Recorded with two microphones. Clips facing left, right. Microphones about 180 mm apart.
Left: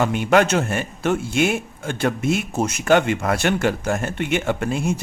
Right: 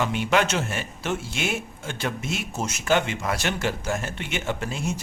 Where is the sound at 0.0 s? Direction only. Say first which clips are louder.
Left 6 dB; 50° left (ahead or behind).